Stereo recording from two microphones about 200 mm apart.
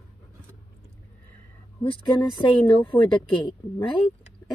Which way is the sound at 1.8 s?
25° left (ahead or behind).